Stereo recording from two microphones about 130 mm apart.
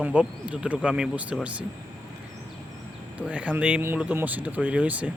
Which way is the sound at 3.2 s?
10° right (ahead or behind).